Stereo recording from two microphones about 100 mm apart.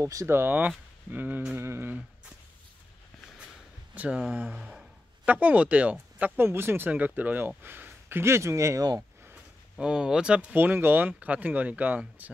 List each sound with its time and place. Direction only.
0.0 s speech: 30° right (ahead or behind); by 2.3 s 15° right (ahead or behind)
3.9 s speech: 15° right (ahead or behind); by 9.0 s 35° right (ahead or behind)
9.2 s speech: 10° right (ahead or behind)